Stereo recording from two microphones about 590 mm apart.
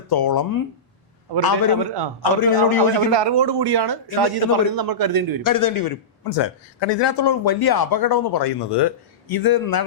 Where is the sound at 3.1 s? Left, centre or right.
Right.